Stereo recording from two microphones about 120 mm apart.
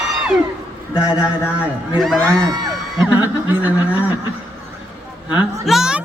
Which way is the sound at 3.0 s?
15° right (ahead or behind).